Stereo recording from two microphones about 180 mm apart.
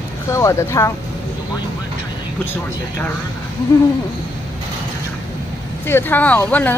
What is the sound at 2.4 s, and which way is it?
Speech, 10° left (ahead or behind).